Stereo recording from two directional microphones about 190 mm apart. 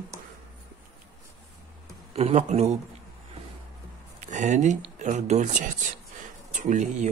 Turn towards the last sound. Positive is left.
turn(degrees=-40)  # may be behind; listen again after turning